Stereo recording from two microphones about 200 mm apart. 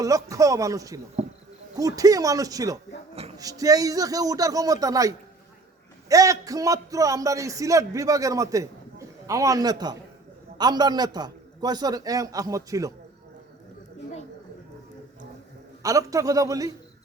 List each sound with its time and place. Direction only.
0.0 s a man's voice: 15° right (ahead or behind)
1.2 s insect: 35° right (ahead or behind)
1.8 s a man's voice: 15° right (ahead or behind)
15.8 s a man's voice: 15° right (ahead or behind)